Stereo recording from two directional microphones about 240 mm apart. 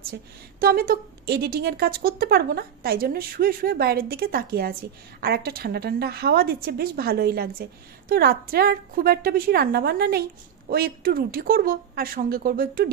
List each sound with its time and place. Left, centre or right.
0.1 s a woman's voice: right